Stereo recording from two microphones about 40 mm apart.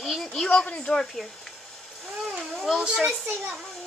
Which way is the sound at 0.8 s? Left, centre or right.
Centre.